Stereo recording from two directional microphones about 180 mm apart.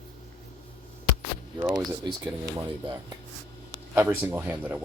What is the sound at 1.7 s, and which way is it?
Speech, 20° right (ahead or behind).